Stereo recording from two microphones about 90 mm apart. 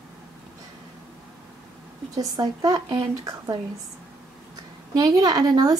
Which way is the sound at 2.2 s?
45° right (ahead or behind).